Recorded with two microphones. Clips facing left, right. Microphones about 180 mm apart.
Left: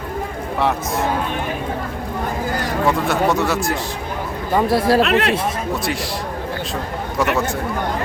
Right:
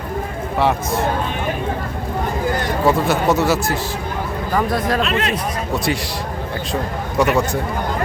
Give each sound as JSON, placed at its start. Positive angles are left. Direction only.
{"t": 2.8, "sound": "speech", "side_deg": 0}
{"t": 4.5, "sound": "speech", "side_deg": 30}
{"t": 5.0, "sound": "speech", "side_deg": 65}
{"t": 7.2, "sound": "speech", "side_deg": 0}